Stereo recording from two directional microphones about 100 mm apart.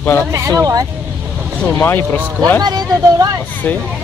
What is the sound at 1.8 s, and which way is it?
Speech, 20° left (ahead or behind).